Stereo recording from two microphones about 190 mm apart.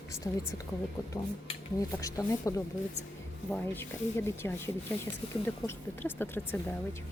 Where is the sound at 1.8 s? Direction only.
20° left (ahead or behind).